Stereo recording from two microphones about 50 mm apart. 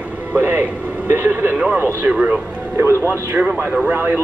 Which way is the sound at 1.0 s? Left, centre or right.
Right.